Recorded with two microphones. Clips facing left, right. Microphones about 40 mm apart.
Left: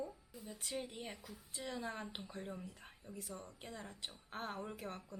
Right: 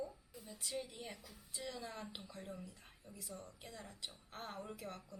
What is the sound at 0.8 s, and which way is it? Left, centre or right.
Speech, left.